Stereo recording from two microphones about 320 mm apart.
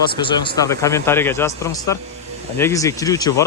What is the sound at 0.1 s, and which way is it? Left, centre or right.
Speech, centre.